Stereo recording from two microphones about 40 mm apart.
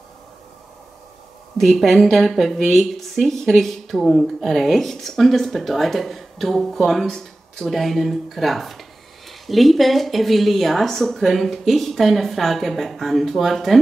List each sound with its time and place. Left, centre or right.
1.8 s speech: centre
7.1 s speech: centre